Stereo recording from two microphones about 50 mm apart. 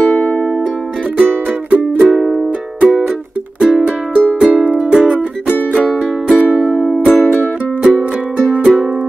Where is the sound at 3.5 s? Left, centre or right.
Centre.